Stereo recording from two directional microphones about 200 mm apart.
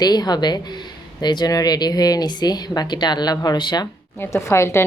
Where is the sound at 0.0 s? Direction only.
20° left (ahead or behind).